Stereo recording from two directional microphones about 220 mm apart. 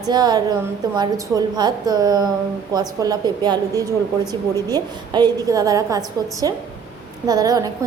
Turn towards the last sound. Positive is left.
turn(degrees=-15)  # may be behind; listen again after turning